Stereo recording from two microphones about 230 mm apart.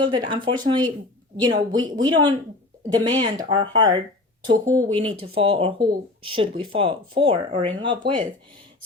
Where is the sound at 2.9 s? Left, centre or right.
Centre.